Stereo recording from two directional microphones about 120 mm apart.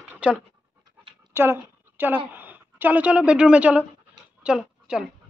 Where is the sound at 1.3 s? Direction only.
20° right (ahead or behind).